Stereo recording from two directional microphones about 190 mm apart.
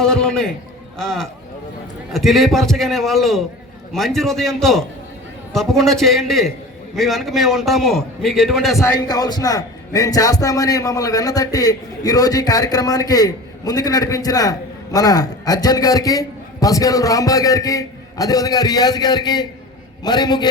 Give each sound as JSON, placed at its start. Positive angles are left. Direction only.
{"t": 0.0, "sound": "a man's voice", "side_deg": 5}
{"t": 8.8, "sound": "a man's voice", "side_deg": 20}